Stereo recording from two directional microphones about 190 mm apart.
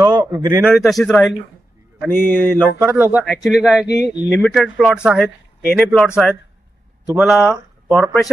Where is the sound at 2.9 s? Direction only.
10° right (ahead or behind).